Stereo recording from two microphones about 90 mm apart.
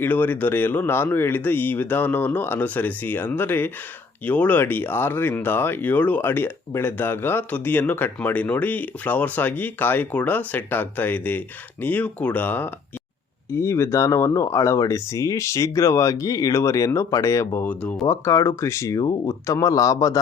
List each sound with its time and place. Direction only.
0.0 s speech: 20° left (ahead or behind); by 20.1 s 40° left (ahead or behind)